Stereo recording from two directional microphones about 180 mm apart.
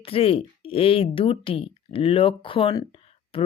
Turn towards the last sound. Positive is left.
turn(degrees=30)  # may be behind; listen again after turning